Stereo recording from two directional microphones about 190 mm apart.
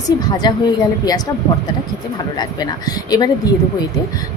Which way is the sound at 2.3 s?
20° left (ahead or behind).